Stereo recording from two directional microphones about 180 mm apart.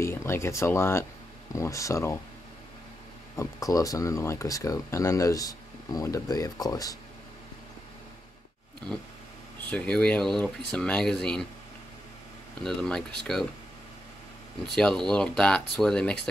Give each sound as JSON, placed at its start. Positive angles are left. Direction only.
{"t": 0.0, "sound": "speech", "side_deg": 15}
{"t": 3.3, "sound": "speech", "side_deg": 20}
{"t": 9.7, "sound": "speech", "side_deg": 5}
{"t": 12.6, "sound": "speech", "side_deg": 5}
{"t": 14.7, "sound": "speech", "side_deg": 5}